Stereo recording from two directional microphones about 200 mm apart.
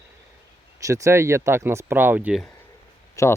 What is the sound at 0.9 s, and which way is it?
Speech, 15° right (ahead or behind).